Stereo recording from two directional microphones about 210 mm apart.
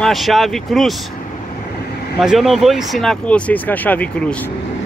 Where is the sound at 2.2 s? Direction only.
Centre (ahead or behind).